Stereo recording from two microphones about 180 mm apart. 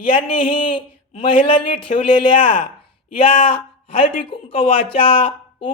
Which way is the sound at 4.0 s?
30° left (ahead or behind).